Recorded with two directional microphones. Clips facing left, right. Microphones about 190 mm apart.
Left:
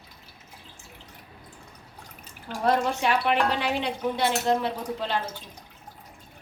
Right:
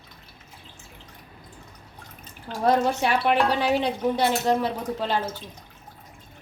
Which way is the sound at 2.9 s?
40° right (ahead or behind).